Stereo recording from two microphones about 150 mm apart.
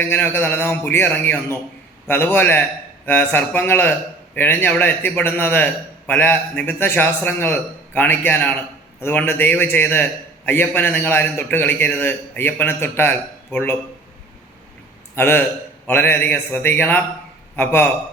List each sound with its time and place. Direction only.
0.0 s a man's voice: 10° left (ahead or behind)
15.1 s a man's voice: 15° left (ahead or behind)